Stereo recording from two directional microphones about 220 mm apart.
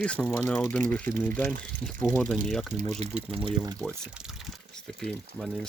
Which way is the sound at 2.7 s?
30° right (ahead or behind).